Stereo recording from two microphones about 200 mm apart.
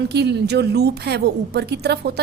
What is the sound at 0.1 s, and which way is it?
A woman's voice, 55° right (ahead or behind).